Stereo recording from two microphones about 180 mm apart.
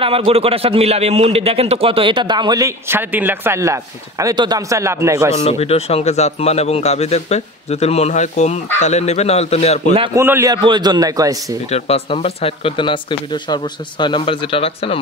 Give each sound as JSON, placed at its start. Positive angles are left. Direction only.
{"t": 0.0, "sound": "a man's voice", "side_deg": -30}
{"t": 5.3, "sound": "a man's voice", "side_deg": 35}
{"t": 10.1, "sound": "a man's voice", "side_deg": -15}
{"t": 11.7, "sound": "speech", "side_deg": 35}